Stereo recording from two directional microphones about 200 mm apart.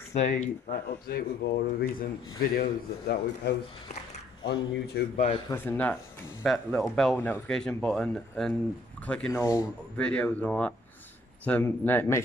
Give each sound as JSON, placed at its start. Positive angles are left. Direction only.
{"t": 0.1, "sound": "speech", "side_deg": 35}
{"t": 0.7, "sound": "a man's voice", "side_deg": 50}
{"t": 5.1, "sound": "speech", "side_deg": 30}
{"t": 5.5, "sound": "speech", "side_deg": 10}